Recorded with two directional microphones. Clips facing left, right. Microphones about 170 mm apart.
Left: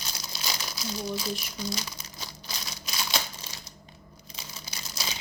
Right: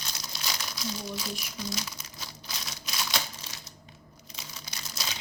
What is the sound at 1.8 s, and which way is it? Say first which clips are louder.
Crumpling: even; centre (ahead or behind).